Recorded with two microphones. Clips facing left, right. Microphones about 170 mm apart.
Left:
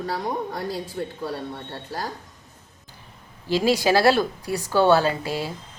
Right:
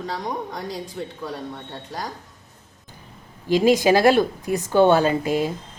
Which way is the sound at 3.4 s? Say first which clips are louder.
Right 4 dB; 15° right (ahead or behind).